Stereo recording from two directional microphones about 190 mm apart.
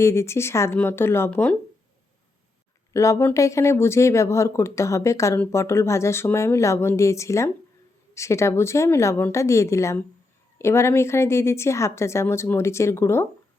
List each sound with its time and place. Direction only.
0.0 s speech: 15° left (ahead or behind)
2.9 s speech: 15° left (ahead or behind)